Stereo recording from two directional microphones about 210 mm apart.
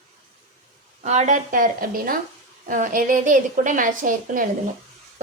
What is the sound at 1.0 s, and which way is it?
A woman's voice, 35° right (ahead or behind).